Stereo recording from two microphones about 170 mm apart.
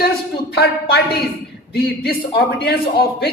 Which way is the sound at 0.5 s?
70° left (ahead or behind).